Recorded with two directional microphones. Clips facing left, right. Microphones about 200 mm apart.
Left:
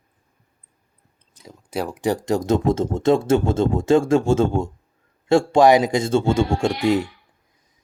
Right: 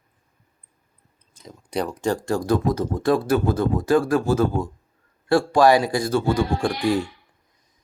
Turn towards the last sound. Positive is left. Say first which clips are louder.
# left 2 dB
turn(degrees=20)  # may be behind; listen again after turning